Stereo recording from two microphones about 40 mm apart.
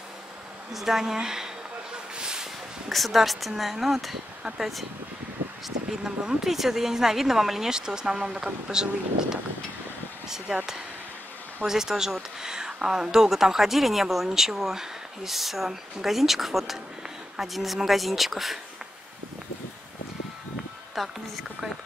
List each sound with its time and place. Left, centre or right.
0.7 s speech: centre
2.1 s a sound: right
2.9 s speech: centre
5.9 s speech: centre
10.2 s speech: centre
20.9 s speech: centre